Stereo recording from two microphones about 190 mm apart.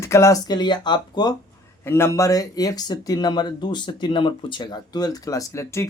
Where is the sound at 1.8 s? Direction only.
10° left (ahead or behind).